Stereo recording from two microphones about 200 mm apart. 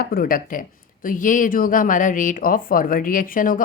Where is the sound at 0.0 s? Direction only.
45° left (ahead or behind).